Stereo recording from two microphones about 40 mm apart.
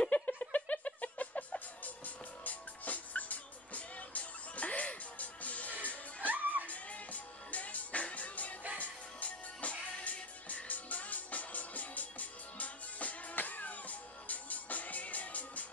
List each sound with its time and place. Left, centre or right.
0.1 s a sound: left
2.0 s music: left
6.3 s music: right
6.7 s music: left